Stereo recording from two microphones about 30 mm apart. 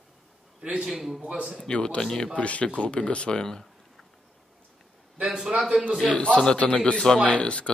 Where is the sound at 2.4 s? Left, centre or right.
Left.